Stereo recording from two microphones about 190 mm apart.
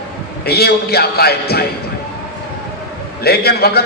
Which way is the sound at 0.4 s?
55° left (ahead or behind).